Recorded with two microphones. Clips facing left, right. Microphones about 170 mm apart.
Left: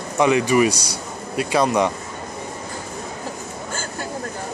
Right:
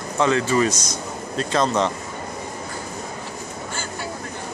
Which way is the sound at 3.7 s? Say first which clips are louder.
Left 3 dB; 45° left (ahead or behind).